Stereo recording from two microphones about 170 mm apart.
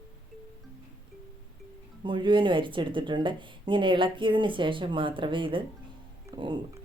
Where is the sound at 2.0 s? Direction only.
30° right (ahead or behind).